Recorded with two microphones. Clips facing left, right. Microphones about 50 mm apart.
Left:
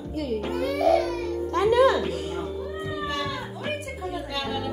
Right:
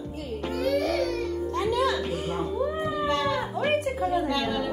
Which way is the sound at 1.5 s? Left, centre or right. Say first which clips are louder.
Left 7 dB; left.